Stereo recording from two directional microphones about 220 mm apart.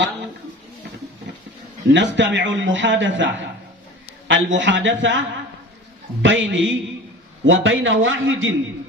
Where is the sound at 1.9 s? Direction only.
55° right (ahead or behind).